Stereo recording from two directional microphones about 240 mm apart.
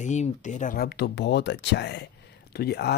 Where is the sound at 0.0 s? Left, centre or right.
Left.